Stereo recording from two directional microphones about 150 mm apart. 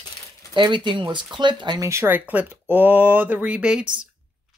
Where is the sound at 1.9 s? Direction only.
15° right (ahead or behind).